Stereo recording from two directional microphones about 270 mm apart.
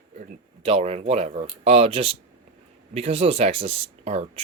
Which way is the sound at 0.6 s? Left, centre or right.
Right.